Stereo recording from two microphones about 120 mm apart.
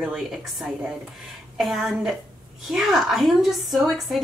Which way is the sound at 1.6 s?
Centre (ahead or behind).